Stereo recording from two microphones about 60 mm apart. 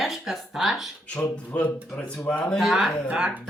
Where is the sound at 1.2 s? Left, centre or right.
Left.